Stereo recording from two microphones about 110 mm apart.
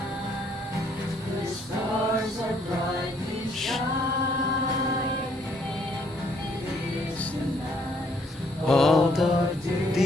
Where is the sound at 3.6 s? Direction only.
Centre (ahead or behind).